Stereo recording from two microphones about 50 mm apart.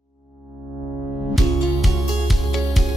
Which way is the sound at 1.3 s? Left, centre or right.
Centre.